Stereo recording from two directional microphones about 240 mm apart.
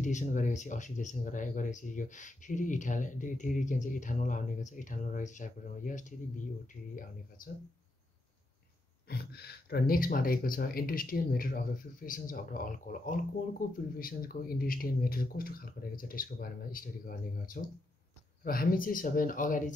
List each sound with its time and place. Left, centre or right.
0.0 s speech: left
9.1 s speech: left